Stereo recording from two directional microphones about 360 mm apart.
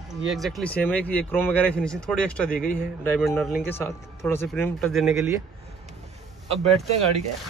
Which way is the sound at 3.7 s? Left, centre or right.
Centre.